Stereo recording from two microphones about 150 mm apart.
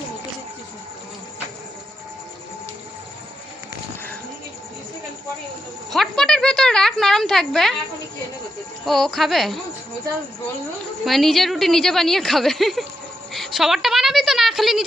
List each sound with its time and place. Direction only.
5.9 s a woman's voice: centre (ahead or behind)
8.8 s a woman's voice: centre (ahead or behind)
11.0 s a woman's voice: centre (ahead or behind)
13.3 s a sound: centre (ahead or behind)